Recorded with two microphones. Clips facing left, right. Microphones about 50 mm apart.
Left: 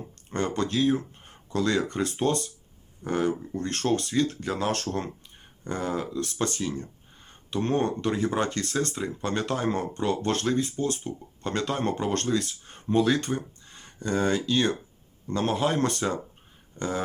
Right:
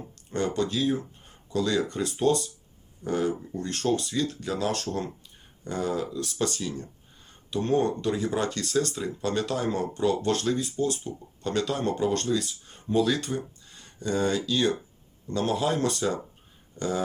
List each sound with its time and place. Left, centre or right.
0.3 s speech: left